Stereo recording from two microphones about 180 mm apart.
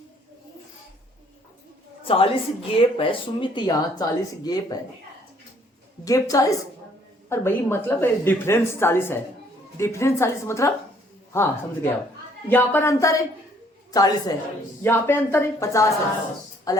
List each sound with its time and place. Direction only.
2.0 s a woman's voice: 30° left (ahead or behind)
6.1 s a woman's voice: 20° left (ahead or behind)